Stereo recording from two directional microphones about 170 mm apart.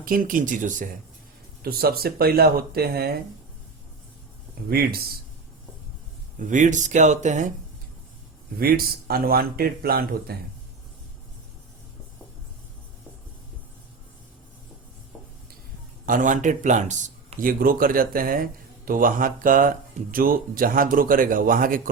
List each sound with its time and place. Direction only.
0.0 s speech: 55° right (ahead or behind)
1.6 s speech: 65° right (ahead or behind)
4.7 s speech: 65° right (ahead or behind)
6.4 s speech: 45° right (ahead or behind)
8.5 s speech: 65° right (ahead or behind)
16.0 s speech: 50° right (ahead or behind)